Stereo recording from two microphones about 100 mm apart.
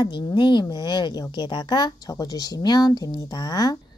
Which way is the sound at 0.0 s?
50° left (ahead or behind).